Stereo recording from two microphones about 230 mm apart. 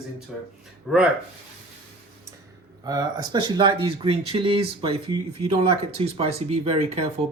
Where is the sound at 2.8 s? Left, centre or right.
Centre.